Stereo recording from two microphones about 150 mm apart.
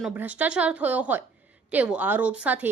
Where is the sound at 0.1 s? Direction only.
10° right (ahead or behind).